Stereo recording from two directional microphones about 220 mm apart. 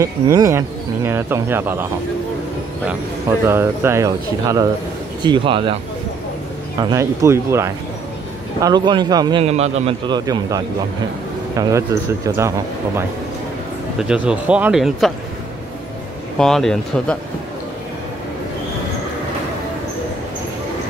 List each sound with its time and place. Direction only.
0.0 s speech: 15° right (ahead or behind)
3.4 s a man's voice: 10° right (ahead or behind)
6.8 s a man's voice: 15° right (ahead or behind)
16.3 s speech: centre (ahead or behind)